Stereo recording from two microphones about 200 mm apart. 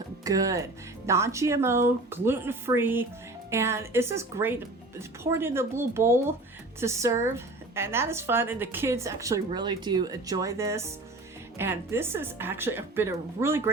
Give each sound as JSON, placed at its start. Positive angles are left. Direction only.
{"t": 0.3, "sound": "a woman's voice", "side_deg": -15}